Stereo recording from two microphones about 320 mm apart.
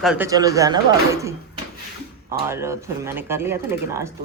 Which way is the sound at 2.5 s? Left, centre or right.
Centre.